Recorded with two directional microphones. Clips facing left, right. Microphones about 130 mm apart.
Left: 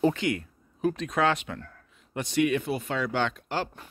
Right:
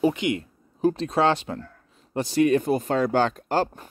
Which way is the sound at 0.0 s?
20° right (ahead or behind).